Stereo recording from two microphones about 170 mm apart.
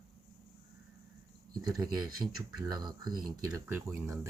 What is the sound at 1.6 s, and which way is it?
Speech, 20° right (ahead or behind).